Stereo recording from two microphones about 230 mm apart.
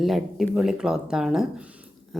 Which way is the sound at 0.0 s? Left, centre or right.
Centre.